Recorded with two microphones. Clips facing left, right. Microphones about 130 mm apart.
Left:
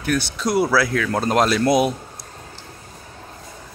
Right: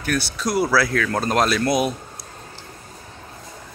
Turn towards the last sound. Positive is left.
turn(degrees=20)  # may be behind; listen again after turning